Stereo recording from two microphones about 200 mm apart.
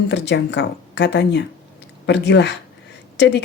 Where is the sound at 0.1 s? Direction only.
60° left (ahead or behind).